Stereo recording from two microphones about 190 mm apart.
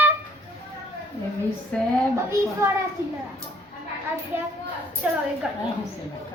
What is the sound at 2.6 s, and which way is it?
Speech, 15° right (ahead or behind).